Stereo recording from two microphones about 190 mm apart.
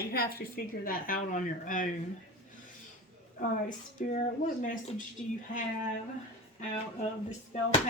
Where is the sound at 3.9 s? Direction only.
45° left (ahead or behind).